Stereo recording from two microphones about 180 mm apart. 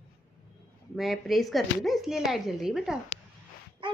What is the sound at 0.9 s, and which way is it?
Speech, centre (ahead or behind).